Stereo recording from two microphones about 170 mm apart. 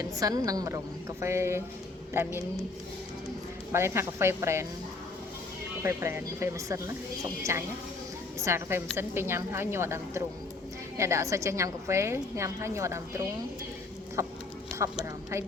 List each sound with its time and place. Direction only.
0.0 s a woman's voice: 20° right (ahead or behind)
3.7 s a woman's voice: 15° right (ahead or behind)
5.8 s a woman's voice: 15° right (ahead or behind)